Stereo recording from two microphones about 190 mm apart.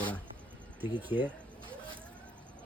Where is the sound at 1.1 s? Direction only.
10° right (ahead or behind).